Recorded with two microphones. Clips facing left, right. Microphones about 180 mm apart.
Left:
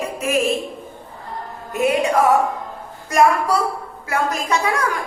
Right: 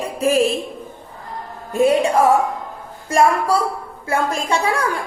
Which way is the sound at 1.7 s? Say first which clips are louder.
Right 3 dB; 30° right (ahead or behind).